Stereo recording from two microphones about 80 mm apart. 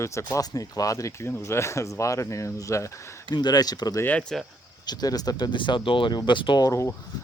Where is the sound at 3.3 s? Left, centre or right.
Left.